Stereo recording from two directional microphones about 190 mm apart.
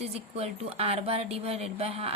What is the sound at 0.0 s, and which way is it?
A woman's voice, 35° right (ahead or behind).